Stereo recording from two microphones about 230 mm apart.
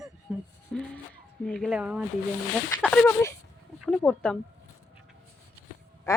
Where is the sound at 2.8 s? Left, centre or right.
Centre.